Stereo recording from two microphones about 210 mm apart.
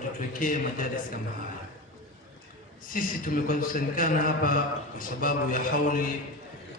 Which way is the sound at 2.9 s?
40° left (ahead or behind).